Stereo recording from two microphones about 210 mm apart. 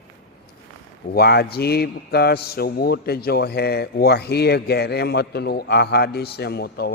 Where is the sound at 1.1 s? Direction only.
50° left (ahead or behind).